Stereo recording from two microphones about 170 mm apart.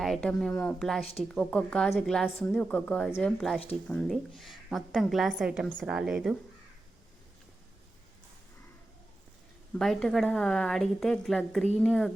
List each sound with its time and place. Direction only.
0.0 s a woman's voice: centre (ahead or behind)
9.7 s a woman's voice: centre (ahead or behind)